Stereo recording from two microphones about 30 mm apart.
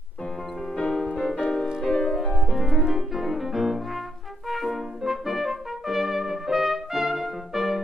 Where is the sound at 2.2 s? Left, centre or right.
Centre.